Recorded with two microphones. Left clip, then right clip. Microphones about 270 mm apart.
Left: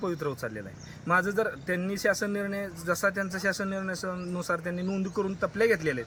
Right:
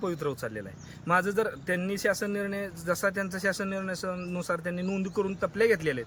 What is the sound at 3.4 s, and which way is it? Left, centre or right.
A man's voice, centre.